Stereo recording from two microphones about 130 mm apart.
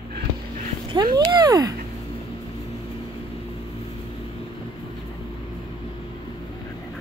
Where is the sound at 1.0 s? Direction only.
30° right (ahead or behind).